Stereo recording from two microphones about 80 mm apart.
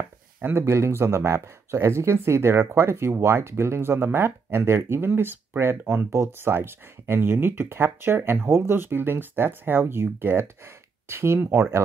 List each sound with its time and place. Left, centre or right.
0.4 s speech: right